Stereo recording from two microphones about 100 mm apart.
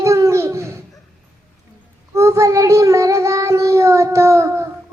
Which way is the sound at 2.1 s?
30° right (ahead or behind).